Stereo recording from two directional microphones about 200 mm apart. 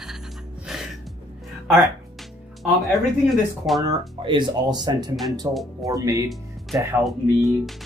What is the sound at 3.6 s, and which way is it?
Speech, 15° right (ahead or behind).